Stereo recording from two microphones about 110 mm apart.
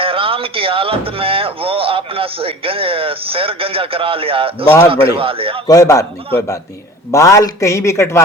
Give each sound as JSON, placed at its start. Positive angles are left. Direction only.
{"t": 0.0, "sound": "a man's voice", "side_deg": -55}
{"t": 5.6, "sound": "speech", "side_deg": 30}